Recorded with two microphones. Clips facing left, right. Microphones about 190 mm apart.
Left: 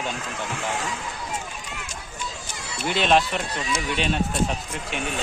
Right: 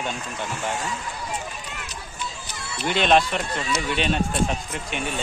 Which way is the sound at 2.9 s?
Centre (ahead or behind).